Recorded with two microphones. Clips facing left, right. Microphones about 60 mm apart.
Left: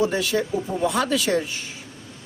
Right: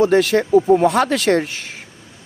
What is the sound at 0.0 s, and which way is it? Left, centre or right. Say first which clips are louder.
Speech: right 8 dB; right.